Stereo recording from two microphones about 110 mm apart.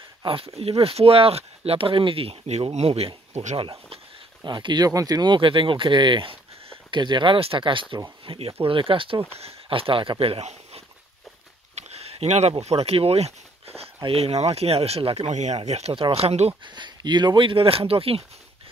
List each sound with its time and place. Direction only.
0.2 s speech: 55° right (ahead or behind); by 3.1 s 70° right (ahead or behind)
3.5 s speech: 60° right (ahead or behind)
4.4 s speech: 45° right (ahead or behind); by 16.5 s 70° right (ahead or behind)
16.6 s speech: 45° right (ahead or behind); by 18.2 s 60° right (ahead or behind)